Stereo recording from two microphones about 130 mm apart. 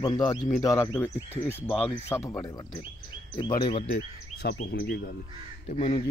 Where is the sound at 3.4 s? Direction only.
40° left (ahead or behind).